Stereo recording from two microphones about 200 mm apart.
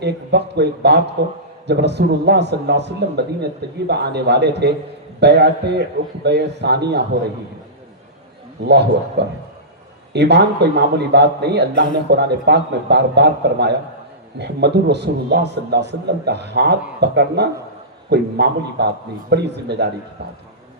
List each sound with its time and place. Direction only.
0.0 s a man's voice: 55° right (ahead or behind)
8.6 s a man's voice: 55° right (ahead or behind)